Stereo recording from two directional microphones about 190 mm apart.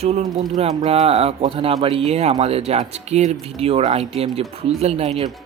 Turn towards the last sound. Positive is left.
turn(degrees=-35)  # may be behind; listen again after turning